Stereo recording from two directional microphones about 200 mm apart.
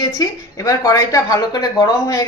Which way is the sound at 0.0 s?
20° left (ahead or behind).